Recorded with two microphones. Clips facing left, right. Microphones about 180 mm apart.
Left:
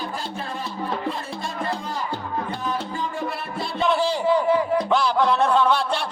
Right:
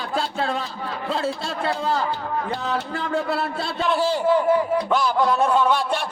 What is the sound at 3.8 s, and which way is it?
A man's voice, centre (ahead or behind).